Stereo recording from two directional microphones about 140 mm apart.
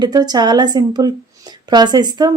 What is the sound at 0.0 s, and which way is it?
Speech, 30° right (ahead or behind).